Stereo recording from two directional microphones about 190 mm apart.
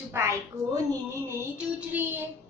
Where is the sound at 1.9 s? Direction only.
10° right (ahead or behind).